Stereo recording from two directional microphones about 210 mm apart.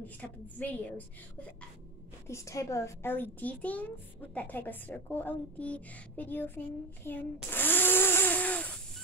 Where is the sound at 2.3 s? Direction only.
15° left (ahead or behind).